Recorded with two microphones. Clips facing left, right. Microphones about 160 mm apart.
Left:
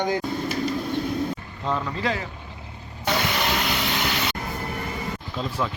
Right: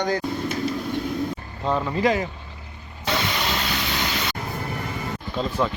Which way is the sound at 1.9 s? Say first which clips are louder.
Right 6 dB; 15° right (ahead or behind).